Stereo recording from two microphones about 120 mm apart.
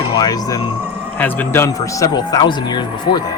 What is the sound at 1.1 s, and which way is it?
Speech, 15° left (ahead or behind).